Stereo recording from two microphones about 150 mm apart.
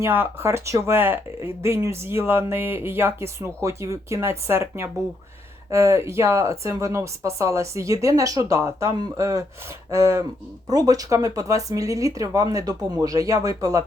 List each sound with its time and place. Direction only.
0.0 s speech: 15° right (ahead or behind)